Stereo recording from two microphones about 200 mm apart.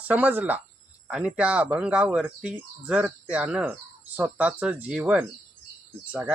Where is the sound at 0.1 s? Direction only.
10° right (ahead or behind).